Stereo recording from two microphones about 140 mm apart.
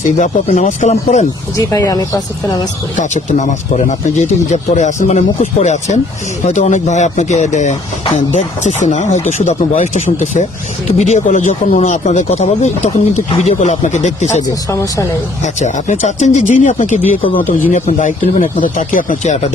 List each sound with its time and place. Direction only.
0.0 s speech: 60° left (ahead or behind)
1.5 s speech: 25° left (ahead or behind)
3.0 s speech: 60° left (ahead or behind)
9.7 s speech: 60° left (ahead or behind)
13.3 s speech: 40° left (ahead or behind)
13.6 s speech: 60° left (ahead or behind)
14.4 s speech: 20° left (ahead or behind)
15.6 s speech: 60° left (ahead or behind)